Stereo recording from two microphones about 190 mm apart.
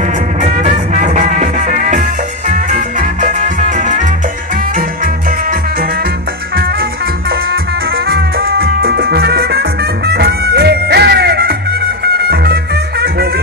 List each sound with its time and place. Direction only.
0.4 s music: 40° right (ahead or behind)
8.1 s music: 50° right (ahead or behind)